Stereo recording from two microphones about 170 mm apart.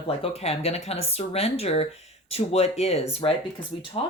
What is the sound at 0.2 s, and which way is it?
Speech, 35° left (ahead or behind).